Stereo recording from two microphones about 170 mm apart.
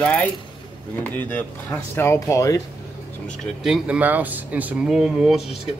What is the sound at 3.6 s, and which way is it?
Speech, 5° right (ahead or behind).